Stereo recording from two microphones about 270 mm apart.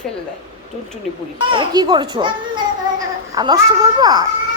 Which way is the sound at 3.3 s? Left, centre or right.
Centre.